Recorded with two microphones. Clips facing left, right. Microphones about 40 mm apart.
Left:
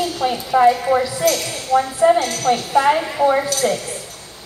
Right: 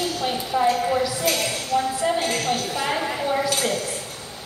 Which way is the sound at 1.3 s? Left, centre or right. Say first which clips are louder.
Left 4 dB; centre.